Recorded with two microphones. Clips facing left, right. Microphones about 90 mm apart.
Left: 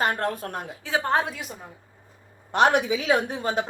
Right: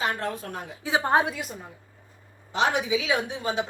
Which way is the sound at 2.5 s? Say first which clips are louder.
Left 4 dB; 60° left (ahead or behind).